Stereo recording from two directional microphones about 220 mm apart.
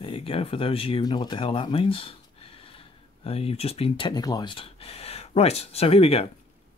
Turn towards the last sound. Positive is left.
turn(degrees=25)  # may be behind; listen again after turning